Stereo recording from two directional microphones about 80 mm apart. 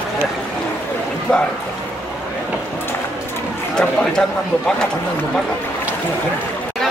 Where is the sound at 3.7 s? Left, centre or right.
Centre.